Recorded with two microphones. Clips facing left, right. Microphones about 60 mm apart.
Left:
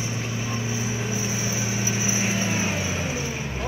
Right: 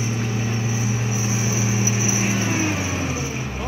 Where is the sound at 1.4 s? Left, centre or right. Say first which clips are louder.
Right 4 dB; centre.